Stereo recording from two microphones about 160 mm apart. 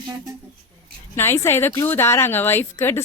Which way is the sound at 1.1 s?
15° left (ahead or behind).